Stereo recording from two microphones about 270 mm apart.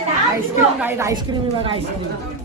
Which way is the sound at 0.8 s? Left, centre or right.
Centre.